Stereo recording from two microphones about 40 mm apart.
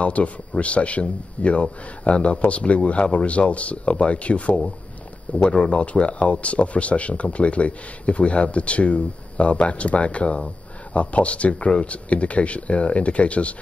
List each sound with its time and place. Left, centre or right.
0.0 s speech: left
5.6 s speech: left